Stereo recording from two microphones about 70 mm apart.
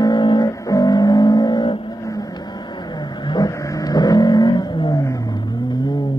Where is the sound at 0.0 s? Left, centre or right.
Left.